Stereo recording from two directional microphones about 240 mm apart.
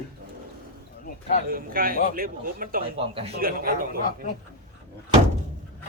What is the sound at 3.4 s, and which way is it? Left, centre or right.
Speech, right.